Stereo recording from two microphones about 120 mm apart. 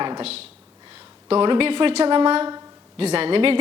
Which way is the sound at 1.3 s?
50° right (ahead or behind).